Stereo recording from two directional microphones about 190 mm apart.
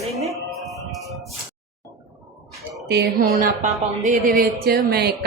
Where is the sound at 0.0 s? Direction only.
35° right (ahead or behind).